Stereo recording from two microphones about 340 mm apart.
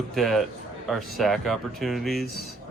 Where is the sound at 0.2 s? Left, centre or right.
Centre.